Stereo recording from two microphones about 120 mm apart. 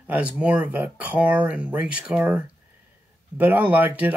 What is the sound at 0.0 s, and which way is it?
Speech, 10° right (ahead or behind).